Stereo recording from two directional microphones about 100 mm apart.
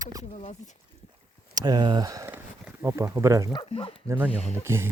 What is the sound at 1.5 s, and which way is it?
Speech, 45° right (ahead or behind).